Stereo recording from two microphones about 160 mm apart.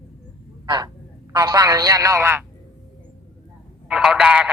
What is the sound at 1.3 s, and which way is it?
Speech, 25° right (ahead or behind).